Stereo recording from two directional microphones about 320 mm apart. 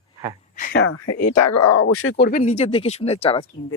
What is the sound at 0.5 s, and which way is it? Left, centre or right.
Speech, left.